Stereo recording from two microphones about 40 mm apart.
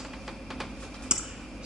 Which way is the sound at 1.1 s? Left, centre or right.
Right.